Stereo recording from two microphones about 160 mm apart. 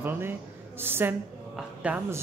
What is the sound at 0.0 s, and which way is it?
A man's voice, 15° right (ahead or behind).